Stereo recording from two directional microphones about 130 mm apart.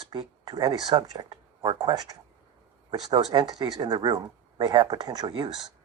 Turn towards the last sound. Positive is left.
turn(degrees=-40)  # may be behind; listen again after turning